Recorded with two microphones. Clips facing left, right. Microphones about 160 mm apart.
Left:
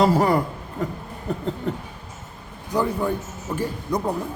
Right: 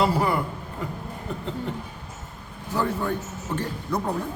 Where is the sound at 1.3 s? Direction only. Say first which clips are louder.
Left 5 dB; 40° left (ahead or behind).